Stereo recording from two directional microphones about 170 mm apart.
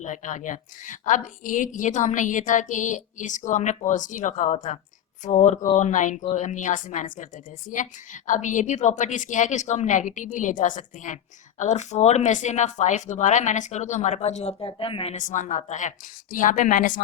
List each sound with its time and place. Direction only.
0.0 s a woman's voice: 45° left (ahead or behind)
14.6 s speech: 30° left (ahead or behind)
15.1 s a woman's voice: 45° left (ahead or behind)